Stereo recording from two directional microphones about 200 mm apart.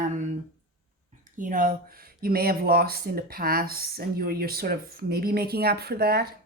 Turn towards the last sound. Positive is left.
turn(degrees=-50)  # may be behind; listen again after turning